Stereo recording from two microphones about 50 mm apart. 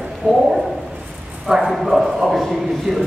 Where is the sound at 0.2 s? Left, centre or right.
Left.